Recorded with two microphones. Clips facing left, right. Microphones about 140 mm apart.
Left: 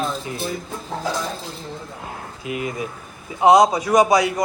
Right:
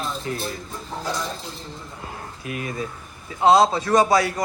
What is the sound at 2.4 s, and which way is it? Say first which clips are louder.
A man's voice: left 3 dB; 20° left (ahead or behind).